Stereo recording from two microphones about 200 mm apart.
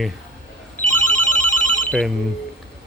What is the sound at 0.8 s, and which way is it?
Telephone bell ringing, 10° left (ahead or behind).